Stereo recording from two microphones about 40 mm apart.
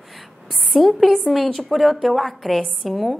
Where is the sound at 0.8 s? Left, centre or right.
Centre.